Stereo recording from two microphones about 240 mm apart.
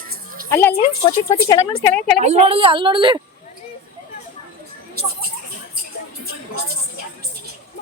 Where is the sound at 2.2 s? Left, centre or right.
Right.